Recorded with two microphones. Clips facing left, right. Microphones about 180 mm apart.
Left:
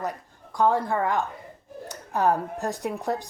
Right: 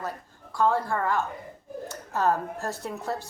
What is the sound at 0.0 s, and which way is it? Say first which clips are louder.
A woman's voice: left 3 dB; 15° left (ahead or behind).